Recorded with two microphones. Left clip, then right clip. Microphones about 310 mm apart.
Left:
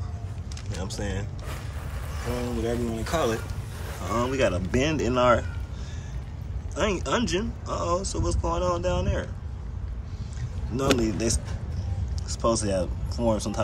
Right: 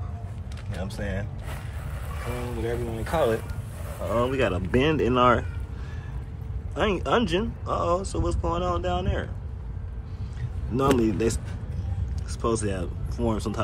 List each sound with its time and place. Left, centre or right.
0.8 s speech: centre
2.6 s speech: centre
6.7 s speech: centre
10.8 s speech: centre